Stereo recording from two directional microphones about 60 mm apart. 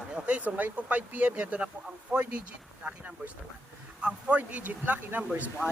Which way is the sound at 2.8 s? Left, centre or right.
Right.